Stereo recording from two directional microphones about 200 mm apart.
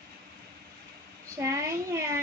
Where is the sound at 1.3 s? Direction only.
15° right (ahead or behind).